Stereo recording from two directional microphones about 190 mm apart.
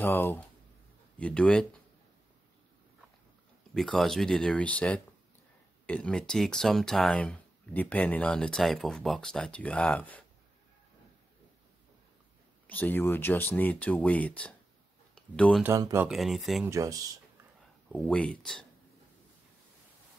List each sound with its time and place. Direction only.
0.0 s speech: 10° left (ahead or behind)
3.7 s speech: centre (ahead or behind)
12.6 s speech: 10° left (ahead or behind)
15.6 s speech: 15° right (ahead or behind)
16.1 s speech: centre (ahead or behind)
16.6 s speech: 15° right (ahead or behind)
17.8 s speech: 5° left (ahead or behind)